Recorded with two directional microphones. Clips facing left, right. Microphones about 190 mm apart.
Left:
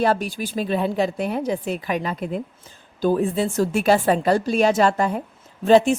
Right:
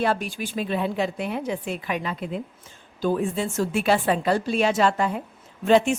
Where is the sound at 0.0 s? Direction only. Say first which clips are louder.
Left 4 dB; 40° left (ahead or behind).